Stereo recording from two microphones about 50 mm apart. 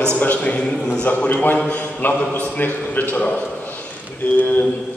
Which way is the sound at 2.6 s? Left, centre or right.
Left.